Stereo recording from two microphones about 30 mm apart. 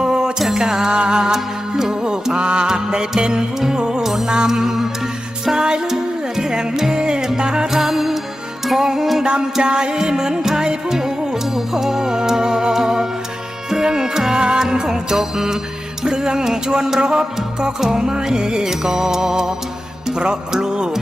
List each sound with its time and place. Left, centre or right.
0.0 s music: right
4.0 s music: centre
4.3 s music: right
5.6 s music: right
7.7 s music: centre
9.2 s music: right
16.0 s music: right